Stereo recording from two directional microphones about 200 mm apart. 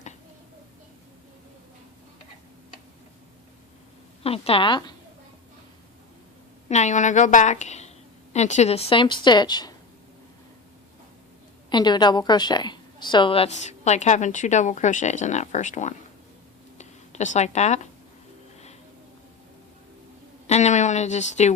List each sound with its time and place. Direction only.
4.2 s speech: 30° left (ahead or behind)
6.7 s a woman's voice: 35° left (ahead or behind)
11.7 s a woman's voice: 20° left (ahead or behind); by 16.0 s 35° left (ahead or behind)
16.7 s a sound: 35° left (ahead or behind)
20.5 s a woman's voice: 35° left (ahead or behind)